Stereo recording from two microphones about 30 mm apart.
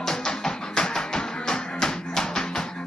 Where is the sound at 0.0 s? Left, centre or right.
Centre.